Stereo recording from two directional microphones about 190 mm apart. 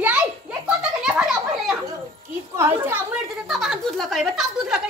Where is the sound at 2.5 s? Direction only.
10° right (ahead or behind).